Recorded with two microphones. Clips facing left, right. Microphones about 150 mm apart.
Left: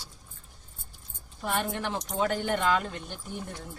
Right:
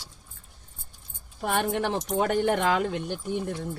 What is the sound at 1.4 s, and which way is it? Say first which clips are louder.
Speech: right 5 dB; 70° right (ahead or behind).